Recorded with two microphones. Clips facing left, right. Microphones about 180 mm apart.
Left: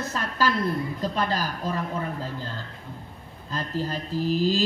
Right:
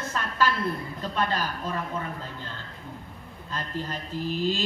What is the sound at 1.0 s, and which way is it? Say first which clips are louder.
Speech: left 2 dB; 35° left (ahead or behind).